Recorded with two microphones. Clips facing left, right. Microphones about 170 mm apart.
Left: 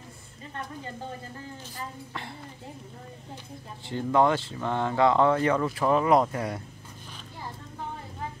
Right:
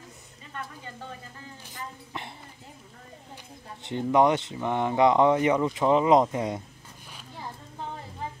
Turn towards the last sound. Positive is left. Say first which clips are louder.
# right 2 dB
turn(degrees=-20)  # may be behind; listen again after turning